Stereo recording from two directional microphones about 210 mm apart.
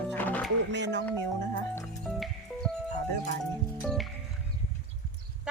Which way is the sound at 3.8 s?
Centre (ahead or behind).